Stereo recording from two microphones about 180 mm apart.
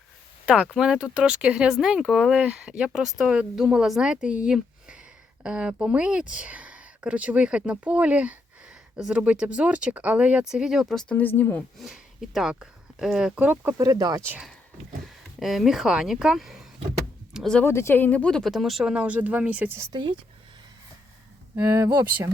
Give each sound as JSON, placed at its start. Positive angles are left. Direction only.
{"t": 0.4, "sound": "speech", "side_deg": -5}
{"t": 11.8, "sound": "speech", "side_deg": 0}
{"t": 14.3, "sound": "speech", "side_deg": -5}
{"t": 19.9, "sound": "speech", "side_deg": -25}
{"t": 21.5, "sound": "speech", "side_deg": -20}